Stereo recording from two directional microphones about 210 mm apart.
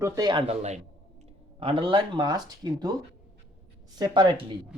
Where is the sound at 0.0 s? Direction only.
20° right (ahead or behind).